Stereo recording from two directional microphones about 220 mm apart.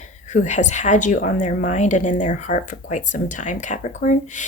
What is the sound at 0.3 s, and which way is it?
A woman's voice, 35° left (ahead or behind).